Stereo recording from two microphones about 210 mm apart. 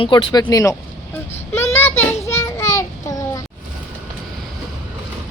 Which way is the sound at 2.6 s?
15° left (ahead or behind).